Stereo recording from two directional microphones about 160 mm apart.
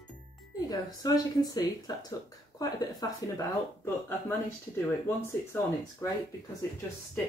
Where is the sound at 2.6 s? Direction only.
25° left (ahead or behind).